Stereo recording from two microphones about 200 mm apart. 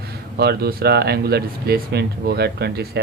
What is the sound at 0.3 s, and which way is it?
Speech, 50° right (ahead or behind).